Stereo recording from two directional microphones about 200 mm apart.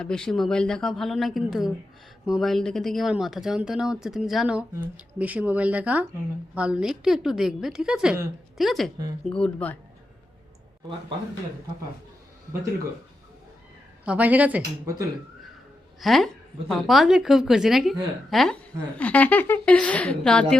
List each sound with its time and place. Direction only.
0.0 s a woman's voice: 5° left (ahead or behind)
14.0 s speech: 5° right (ahead or behind)
16.0 s a woman's voice: centre (ahead or behind)